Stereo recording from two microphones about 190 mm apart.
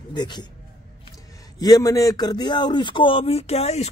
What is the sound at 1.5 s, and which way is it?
A man's voice, 20° left (ahead or behind).